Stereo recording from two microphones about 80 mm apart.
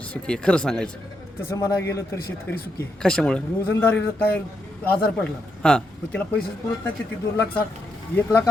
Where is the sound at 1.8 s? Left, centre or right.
Left.